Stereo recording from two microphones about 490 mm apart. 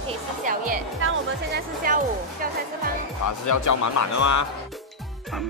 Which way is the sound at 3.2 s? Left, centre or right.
Left.